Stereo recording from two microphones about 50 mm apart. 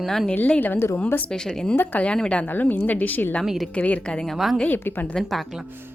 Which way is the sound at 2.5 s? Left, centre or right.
Left.